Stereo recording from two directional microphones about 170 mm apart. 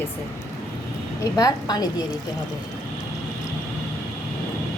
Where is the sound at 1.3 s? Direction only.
20° left (ahead or behind).